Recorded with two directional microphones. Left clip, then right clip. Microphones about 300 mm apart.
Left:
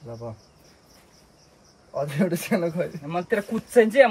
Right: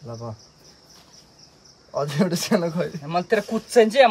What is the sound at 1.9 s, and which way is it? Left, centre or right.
Speech, centre.